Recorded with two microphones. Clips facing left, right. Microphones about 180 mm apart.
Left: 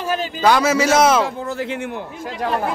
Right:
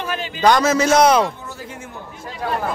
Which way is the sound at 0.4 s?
5° left (ahead or behind).